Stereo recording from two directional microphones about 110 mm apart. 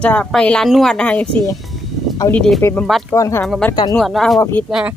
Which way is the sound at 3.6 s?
10° left (ahead or behind).